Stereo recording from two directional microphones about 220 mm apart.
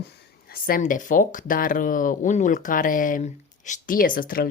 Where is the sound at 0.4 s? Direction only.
40° left (ahead or behind).